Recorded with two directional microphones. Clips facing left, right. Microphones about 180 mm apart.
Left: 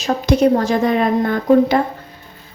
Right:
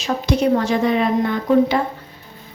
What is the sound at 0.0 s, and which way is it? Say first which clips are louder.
A woman's voice: left 4 dB; 40° left (ahead or behind).